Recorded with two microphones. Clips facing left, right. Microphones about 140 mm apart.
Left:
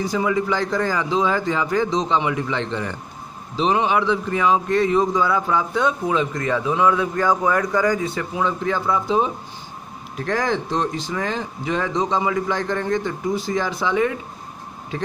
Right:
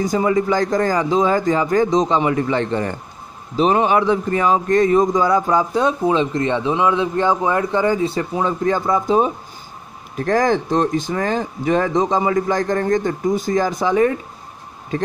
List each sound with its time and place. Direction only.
0.0 s speech: 45° right (ahead or behind)